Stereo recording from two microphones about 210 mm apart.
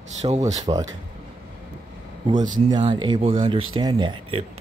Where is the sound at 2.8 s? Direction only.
25° right (ahead or behind).